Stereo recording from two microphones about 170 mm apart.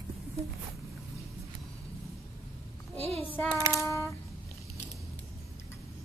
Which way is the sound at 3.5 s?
15° right (ahead or behind).